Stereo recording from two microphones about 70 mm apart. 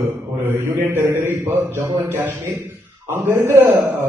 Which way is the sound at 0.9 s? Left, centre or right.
Right.